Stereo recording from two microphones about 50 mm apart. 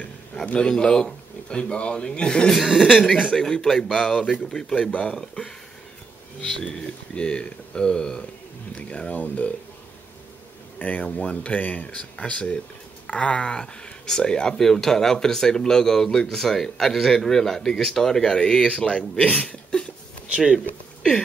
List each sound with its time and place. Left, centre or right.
0.7 s speech: centre
2.5 s a man's voice: centre
3.3 s speech: centre
10.8 s speech: left
19.4 s a sound: centre
20.2 s speech: centre